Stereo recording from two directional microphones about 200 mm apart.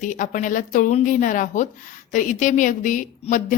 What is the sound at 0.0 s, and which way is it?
Speech, 40° left (ahead or behind).